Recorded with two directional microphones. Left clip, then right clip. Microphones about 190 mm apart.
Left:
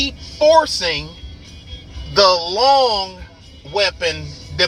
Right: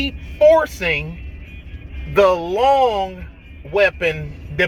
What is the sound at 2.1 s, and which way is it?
A man's voice, 30° right (ahead or behind).